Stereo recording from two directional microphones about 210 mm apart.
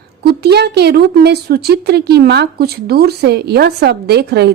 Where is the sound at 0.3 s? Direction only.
50° right (ahead or behind).